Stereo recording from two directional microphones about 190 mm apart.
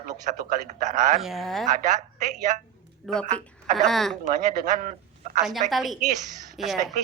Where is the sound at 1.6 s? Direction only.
40° right (ahead or behind).